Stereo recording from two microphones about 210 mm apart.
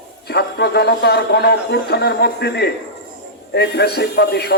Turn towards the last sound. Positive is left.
turn(degrees=50)  # may be behind; listen again after turning